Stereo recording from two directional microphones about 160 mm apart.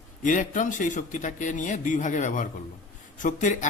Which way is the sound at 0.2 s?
55° left (ahead or behind).